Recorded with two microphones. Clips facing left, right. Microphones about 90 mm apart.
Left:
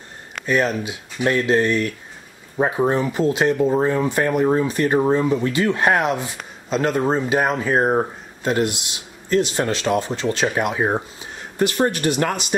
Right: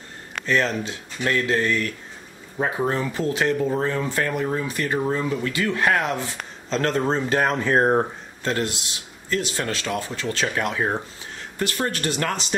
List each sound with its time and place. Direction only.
0.5 s speech: 10° left (ahead or behind)
6.7 s speech: 10° left (ahead or behind)
8.5 s speech: 15° left (ahead or behind)